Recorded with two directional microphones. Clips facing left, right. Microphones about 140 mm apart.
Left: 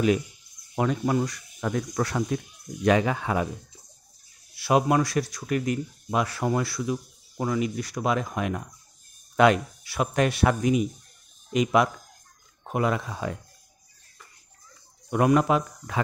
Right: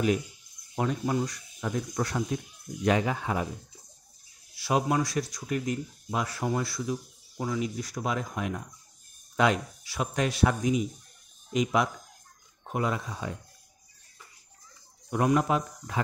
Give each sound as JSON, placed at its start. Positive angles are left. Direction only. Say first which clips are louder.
{"t": 0.7, "sound": "speech", "louder": "left 4 dB", "side_deg": 90}
{"t": 4.6, "sound": "speech", "louder": "left 5 dB", "side_deg": 70}
{"t": 15.0, "sound": "speech", "louder": "left 4 dB", "side_deg": 85}